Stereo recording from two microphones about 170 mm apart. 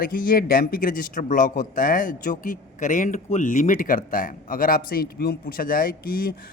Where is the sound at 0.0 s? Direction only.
55° left (ahead or behind).